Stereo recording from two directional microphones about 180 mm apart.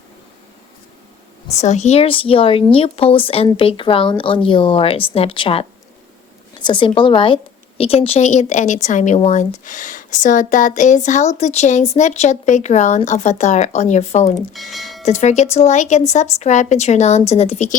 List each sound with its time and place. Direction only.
1.5 s speech: 40° left (ahead or behind)
14.5 s speech: centre (ahead or behind)
15.0 s speech: 40° left (ahead or behind)